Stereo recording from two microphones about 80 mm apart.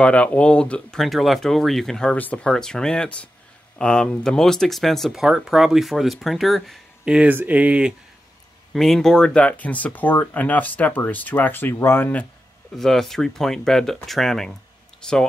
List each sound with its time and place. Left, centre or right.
0.0 s speech: centre
1.0 s speech: centre
2.1 s speech: left
2.4 s speech: centre
7.1 s speech: centre
8.7 s speech: centre; by 12.1 s left
12.7 s speech: centre